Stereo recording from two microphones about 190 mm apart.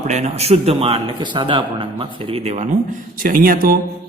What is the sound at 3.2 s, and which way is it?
Speech, 50° right (ahead or behind).